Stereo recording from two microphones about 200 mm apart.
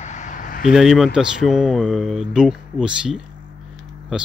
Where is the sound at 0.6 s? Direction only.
Centre (ahead or behind).